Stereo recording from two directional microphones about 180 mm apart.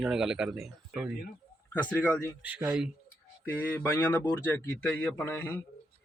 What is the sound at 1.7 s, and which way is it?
Speech, 10° left (ahead or behind).